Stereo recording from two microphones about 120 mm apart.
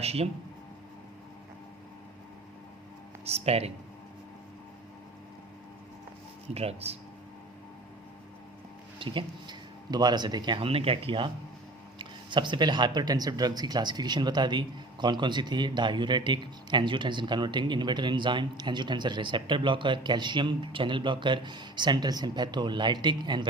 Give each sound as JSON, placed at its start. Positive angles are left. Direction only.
{"t": 0.0, "sound": "speech", "side_deg": -60}
{"t": 3.2, "sound": "speech", "side_deg": -60}
{"t": 6.5, "sound": "speech", "side_deg": -55}
{"t": 9.0, "sound": "speech", "side_deg": -45}
{"t": 10.7, "sound": "speech", "side_deg": -50}